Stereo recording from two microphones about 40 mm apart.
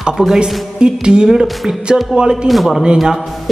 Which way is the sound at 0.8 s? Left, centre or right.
Right.